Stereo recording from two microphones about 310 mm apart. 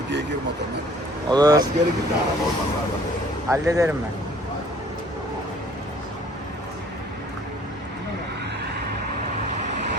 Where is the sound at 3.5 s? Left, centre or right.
Centre.